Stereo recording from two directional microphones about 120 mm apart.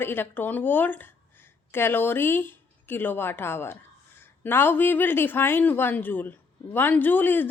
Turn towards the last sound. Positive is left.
turn(degrees=15)  # may be behind; listen again after turning